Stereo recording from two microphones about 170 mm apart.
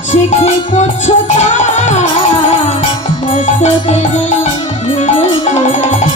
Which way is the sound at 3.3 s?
40° left (ahead or behind).